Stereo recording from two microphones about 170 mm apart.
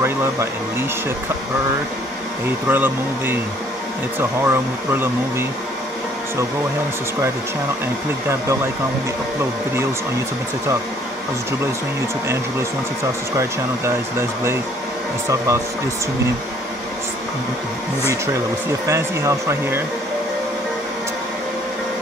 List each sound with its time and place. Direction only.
0.0 s speech: 15° right (ahead or behind)
2.7 s speech: 10° right (ahead or behind)
13.4 s speech: 15° right (ahead or behind)
18.9 s speech: 15° right (ahead or behind)